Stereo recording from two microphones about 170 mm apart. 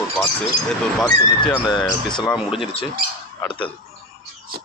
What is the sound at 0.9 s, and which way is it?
Speech, 5° left (ahead or behind).